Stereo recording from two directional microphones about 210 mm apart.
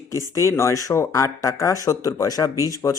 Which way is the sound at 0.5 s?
15° left (ahead or behind).